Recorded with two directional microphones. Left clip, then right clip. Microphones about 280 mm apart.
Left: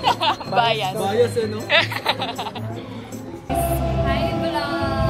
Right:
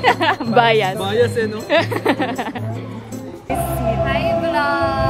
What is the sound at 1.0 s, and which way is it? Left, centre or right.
Speech, centre.